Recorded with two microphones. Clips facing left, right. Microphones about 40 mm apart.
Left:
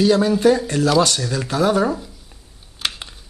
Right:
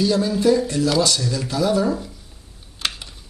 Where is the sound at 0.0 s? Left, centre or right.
Left.